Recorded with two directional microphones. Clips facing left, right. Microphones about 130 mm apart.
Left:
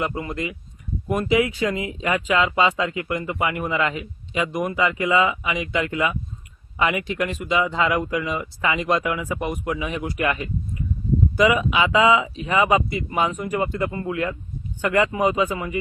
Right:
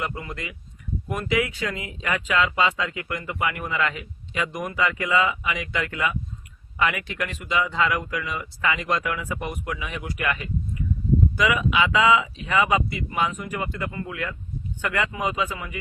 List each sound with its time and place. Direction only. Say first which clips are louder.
0.0 s speech: left 5 dB; 25° left (ahead or behind)